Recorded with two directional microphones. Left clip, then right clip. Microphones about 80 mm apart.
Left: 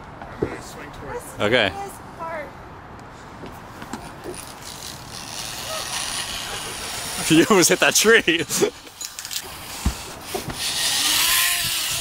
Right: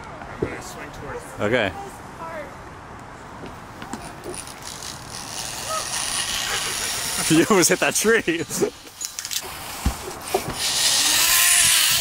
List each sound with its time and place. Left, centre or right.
1.4 s speech: centre
5.3 s vehicle: centre
10.3 s wood: centre
11.5 s a sound: centre